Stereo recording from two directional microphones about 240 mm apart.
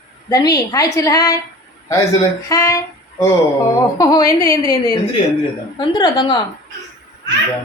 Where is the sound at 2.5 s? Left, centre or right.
Centre.